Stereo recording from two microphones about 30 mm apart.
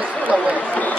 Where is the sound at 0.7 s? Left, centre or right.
Left.